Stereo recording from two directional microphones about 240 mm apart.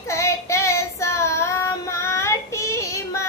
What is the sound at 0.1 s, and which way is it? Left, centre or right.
Child singing, centre.